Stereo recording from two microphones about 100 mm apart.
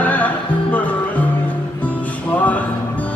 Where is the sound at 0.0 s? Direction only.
15° left (ahead or behind).